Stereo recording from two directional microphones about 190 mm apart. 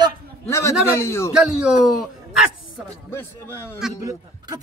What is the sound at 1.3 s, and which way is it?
Speech, 5° right (ahead or behind).